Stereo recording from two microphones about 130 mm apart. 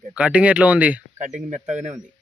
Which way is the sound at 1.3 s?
65° right (ahead or behind).